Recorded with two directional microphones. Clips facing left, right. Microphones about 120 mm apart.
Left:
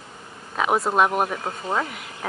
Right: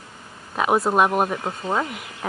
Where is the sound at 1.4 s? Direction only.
15° right (ahead or behind).